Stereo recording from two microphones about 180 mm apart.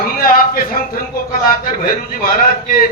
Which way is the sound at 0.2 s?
50° left (ahead or behind).